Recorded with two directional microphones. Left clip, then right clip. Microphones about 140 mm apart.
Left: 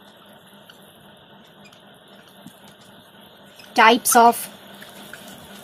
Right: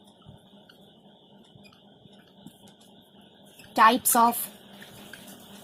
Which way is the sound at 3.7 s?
50° right (ahead or behind).